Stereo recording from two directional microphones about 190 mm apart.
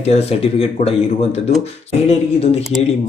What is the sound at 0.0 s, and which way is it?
Speech, 35° left (ahead or behind).